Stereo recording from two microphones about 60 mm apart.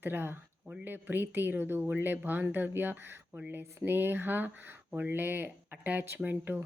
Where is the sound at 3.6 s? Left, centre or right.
Right.